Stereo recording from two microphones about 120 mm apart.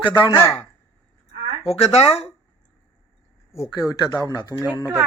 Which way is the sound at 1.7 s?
60° left (ahead or behind).